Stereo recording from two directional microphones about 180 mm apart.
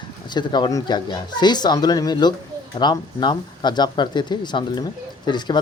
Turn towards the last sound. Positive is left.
turn(degrees=25)  # may be behind; listen again after turning